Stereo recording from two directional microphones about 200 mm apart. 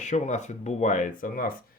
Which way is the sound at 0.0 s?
35° left (ahead or behind).